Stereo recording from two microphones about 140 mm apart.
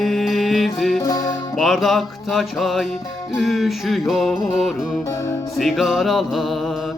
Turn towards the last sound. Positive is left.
turn(degrees=0)  # may be behind; listen again after turning